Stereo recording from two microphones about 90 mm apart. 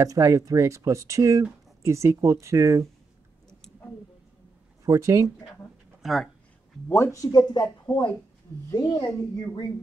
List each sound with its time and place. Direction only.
0.0 s speech: 35° right (ahead or behind)
4.8 s speech: 35° right (ahead or behind)
6.0 s speech: centre (ahead or behind)
6.9 s speech: 35° left (ahead or behind); by 7.7 s 50° left (ahead or behind)
8.7 s a woman's voice: 60° left (ahead or behind)